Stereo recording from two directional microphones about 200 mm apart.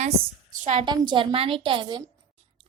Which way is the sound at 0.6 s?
35° right (ahead or behind).